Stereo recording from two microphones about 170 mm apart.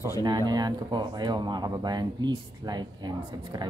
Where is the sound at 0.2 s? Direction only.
25° right (ahead or behind).